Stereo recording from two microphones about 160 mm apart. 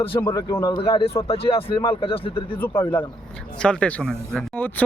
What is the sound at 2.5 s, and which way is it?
Speech, 10° left (ahead or behind).